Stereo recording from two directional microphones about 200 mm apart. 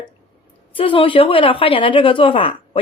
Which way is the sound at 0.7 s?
25° left (ahead or behind).